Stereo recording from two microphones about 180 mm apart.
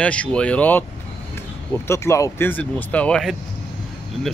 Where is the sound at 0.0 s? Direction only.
5° left (ahead or behind).